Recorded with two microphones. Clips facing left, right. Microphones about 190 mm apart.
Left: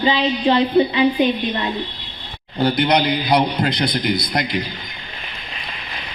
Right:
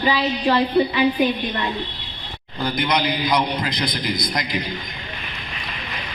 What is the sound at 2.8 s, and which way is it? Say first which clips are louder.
A man's voice: left 1 dB; 60° left (ahead or behind).